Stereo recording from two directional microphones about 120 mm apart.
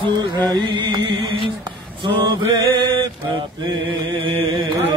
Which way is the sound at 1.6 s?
40° right (ahead or behind).